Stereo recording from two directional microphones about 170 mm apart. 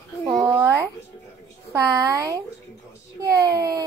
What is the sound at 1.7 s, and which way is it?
Speech, 20° right (ahead or behind).